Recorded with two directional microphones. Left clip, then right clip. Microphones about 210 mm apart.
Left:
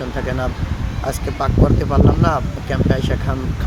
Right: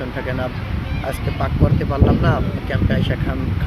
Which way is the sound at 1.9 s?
25° left (ahead or behind).